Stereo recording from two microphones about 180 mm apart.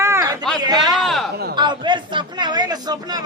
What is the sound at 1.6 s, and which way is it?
A man's voice, 25° right (ahead or behind).